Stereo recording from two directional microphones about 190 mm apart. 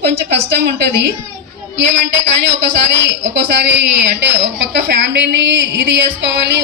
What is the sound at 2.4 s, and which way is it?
A woman's voice, 70° right (ahead or behind).